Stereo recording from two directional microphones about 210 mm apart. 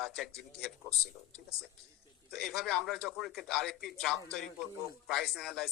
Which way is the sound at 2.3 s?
Centre (ahead or behind).